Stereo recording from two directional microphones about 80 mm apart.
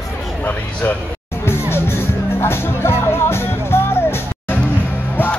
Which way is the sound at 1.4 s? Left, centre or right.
Left.